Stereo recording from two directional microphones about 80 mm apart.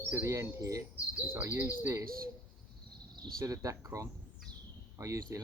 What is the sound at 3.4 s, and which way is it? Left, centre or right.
Speech, right.